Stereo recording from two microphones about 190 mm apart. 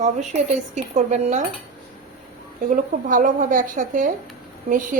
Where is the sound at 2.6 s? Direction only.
45° right (ahead or behind).